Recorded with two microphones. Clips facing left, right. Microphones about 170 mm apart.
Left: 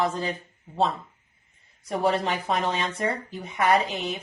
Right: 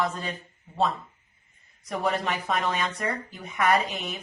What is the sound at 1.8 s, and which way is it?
A woman's voice, 30° left (ahead or behind).